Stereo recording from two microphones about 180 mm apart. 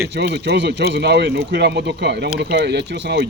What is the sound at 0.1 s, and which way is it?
Speech, 70° right (ahead or behind).